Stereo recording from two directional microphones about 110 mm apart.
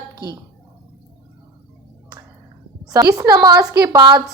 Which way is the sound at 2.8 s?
30° right (ahead or behind).